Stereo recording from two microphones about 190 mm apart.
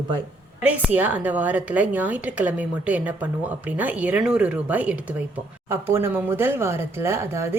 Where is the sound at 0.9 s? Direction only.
10° right (ahead or behind).